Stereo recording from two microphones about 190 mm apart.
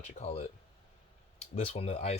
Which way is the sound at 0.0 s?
35° left (ahead or behind).